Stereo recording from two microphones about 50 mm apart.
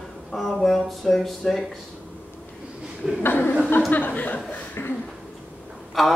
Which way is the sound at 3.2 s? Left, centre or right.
Left.